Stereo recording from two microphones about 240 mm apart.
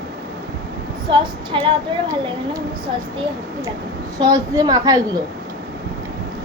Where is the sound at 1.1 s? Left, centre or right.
Right.